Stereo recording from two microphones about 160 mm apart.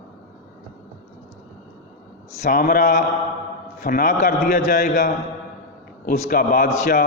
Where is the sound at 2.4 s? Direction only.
60° left (ahead or behind).